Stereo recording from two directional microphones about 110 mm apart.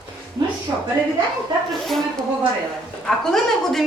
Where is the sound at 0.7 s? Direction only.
25° right (ahead or behind).